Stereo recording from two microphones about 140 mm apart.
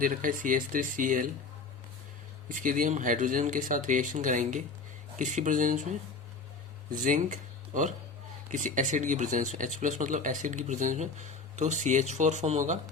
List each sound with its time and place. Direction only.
0.0 s speech: 75° right (ahead or behind)
2.5 s speech: 70° right (ahead or behind)
7.0 s speech: 65° right (ahead or behind)